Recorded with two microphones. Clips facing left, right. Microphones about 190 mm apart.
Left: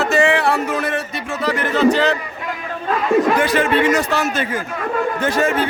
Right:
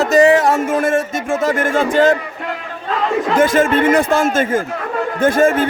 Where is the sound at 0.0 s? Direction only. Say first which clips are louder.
Right 5 dB; 40° right (ahead or behind).